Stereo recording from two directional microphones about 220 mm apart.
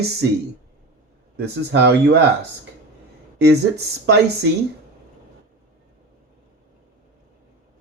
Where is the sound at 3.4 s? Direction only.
50° right (ahead or behind).